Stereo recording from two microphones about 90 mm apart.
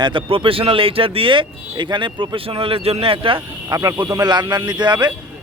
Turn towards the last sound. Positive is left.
turn(degrees=-55)  # may be behind; listen again after turning